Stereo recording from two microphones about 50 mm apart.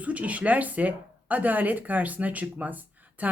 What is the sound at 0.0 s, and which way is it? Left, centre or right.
A woman's voice, right.